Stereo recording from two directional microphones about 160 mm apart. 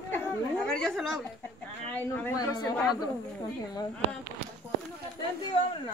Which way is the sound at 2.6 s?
25° left (ahead or behind).